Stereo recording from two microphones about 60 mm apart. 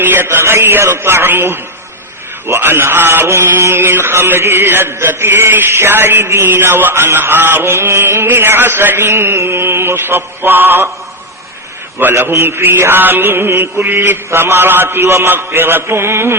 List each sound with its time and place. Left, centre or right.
0.0 s mantra: right
11.9 s mantra: right